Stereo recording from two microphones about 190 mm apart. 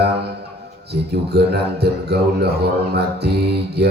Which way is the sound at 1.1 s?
60° right (ahead or behind).